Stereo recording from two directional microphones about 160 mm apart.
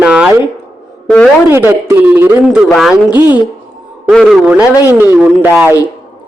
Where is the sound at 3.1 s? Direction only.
10° right (ahead or behind).